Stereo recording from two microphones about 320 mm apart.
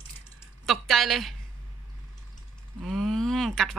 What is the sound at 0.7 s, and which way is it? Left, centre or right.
Speech, centre.